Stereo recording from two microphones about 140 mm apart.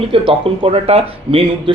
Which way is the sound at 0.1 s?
40° right (ahead or behind).